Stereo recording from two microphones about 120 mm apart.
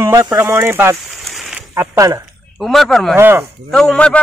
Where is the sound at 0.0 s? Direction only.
25° right (ahead or behind).